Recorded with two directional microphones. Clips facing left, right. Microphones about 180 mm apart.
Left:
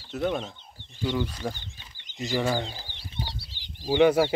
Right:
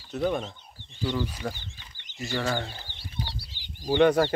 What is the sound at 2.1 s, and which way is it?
Speech, 15° left (ahead or behind).